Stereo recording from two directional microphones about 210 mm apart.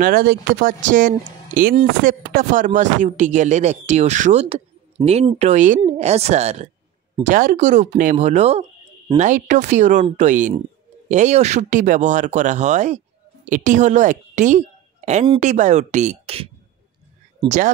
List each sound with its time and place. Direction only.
0.0 s speech: 45° right (ahead or behind)